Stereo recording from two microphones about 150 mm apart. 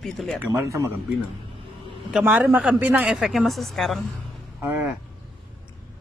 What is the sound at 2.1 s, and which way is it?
A woman's voice, 5° right (ahead or behind).